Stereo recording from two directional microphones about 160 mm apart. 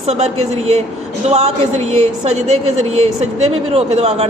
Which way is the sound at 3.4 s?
40° right (ahead or behind).